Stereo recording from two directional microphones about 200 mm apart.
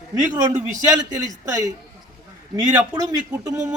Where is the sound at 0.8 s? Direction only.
15° right (ahead or behind).